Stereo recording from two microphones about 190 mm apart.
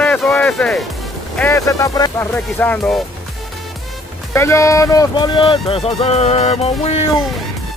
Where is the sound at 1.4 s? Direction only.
15° left (ahead or behind).